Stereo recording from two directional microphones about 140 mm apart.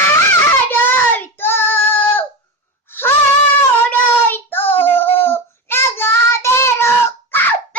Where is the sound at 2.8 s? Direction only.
15° left (ahead or behind).